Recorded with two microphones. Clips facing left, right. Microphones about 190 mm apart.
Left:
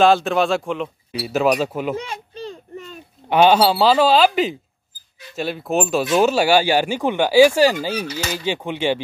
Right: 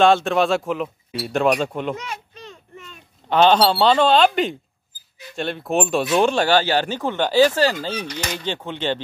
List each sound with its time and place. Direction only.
0.0 s speech: centre (ahead or behind)
2.0 s a sound: 30° left (ahead or behind)
3.3 s speech: 10° left (ahead or behind)